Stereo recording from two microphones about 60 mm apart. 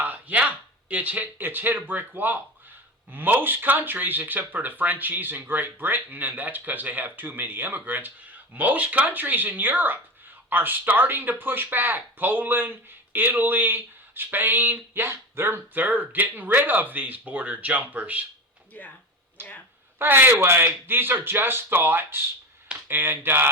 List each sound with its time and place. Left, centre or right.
0.0 s speech: right
18.7 s speech: left
19.4 s speech: right